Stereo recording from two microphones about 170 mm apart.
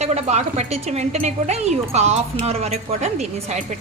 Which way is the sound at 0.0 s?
40° right (ahead or behind).